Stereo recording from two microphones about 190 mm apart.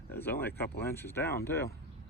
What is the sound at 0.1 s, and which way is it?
Speech, 10° left (ahead or behind).